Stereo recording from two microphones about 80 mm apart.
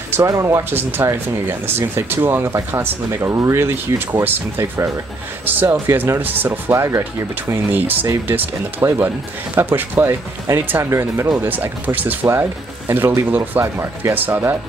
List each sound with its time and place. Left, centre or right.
0.2 s speech: right
0.7 s speech: right
7.7 s speech: right
8.8 s speech: right
9.6 s speech: right
11.3 s speech: right